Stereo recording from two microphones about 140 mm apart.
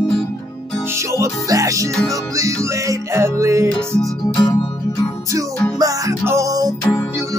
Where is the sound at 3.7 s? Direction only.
5° left (ahead or behind).